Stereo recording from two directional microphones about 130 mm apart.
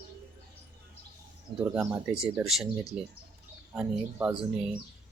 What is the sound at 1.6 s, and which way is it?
Speech, 20° right (ahead or behind).